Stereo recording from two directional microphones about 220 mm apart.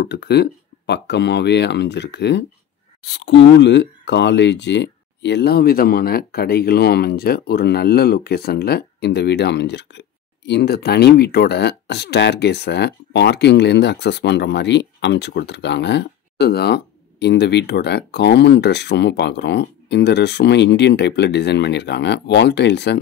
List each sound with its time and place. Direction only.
0.0 s speech: 50° left (ahead or behind)